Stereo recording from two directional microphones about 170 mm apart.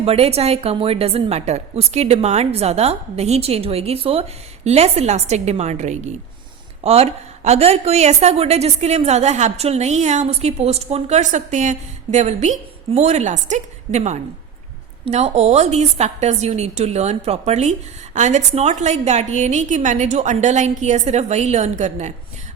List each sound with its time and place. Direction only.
0.0 s a woman's voice: 35° right (ahead or behind)